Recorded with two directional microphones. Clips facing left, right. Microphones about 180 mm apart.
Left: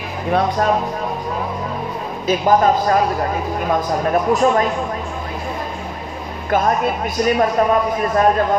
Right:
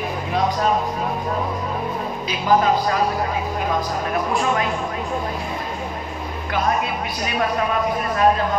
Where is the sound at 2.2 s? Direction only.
45° left (ahead or behind).